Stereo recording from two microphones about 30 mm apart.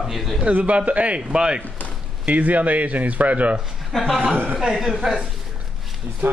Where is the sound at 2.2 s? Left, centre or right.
Right.